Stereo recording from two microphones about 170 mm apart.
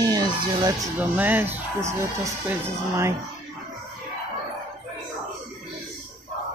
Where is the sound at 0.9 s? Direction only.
10° right (ahead or behind).